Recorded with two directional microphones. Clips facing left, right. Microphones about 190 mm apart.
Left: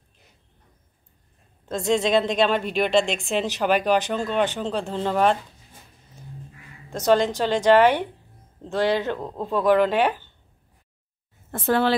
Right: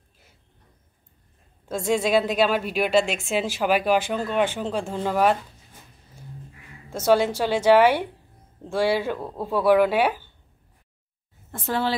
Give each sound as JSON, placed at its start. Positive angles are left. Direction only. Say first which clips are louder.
{"t": 1.9, "sound": "speech", "louder": "left 1 dB", "side_deg": -5}
{"t": 7.1, "sound": "speech", "louder": "even", "side_deg": -10}
{"t": 11.5, "sound": "a woman's voice", "louder": "left 5 dB", "side_deg": 60}